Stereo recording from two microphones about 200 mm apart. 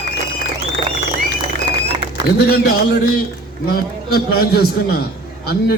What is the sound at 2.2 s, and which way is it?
A man's voice, 50° left (ahead or behind).